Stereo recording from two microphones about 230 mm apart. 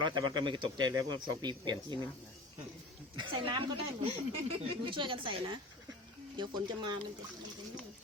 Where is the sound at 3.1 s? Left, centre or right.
Centre.